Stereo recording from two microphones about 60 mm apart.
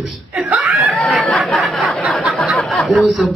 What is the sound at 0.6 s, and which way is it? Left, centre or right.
Snicker, centre.